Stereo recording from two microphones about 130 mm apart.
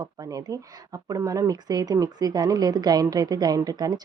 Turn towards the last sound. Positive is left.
turn(degrees=-30)  # may be behind; listen again after turning